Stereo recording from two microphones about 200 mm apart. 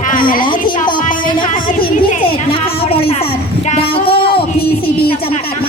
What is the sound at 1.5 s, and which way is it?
Speech, 45° left (ahead or behind).